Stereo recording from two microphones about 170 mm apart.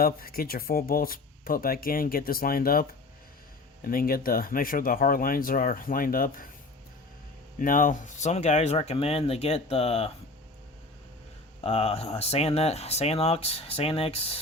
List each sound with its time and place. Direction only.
0.0 s speech: 60° left (ahead or behind)
3.8 s speech: 60° left (ahead or behind)
7.6 s speech: 50° left (ahead or behind); by 10.1 s 35° left (ahead or behind)
11.6 s speech: 35° left (ahead or behind)